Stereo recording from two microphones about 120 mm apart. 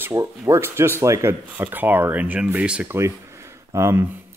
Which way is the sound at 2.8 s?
25° right (ahead or behind).